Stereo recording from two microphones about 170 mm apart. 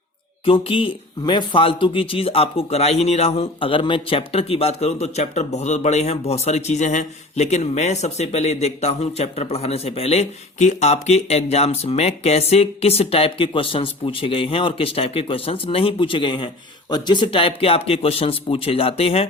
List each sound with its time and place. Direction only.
0.4 s speech: 30° left (ahead or behind)